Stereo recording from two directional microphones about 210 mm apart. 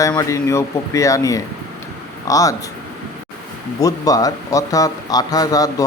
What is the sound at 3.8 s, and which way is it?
Speech, 15° left (ahead or behind).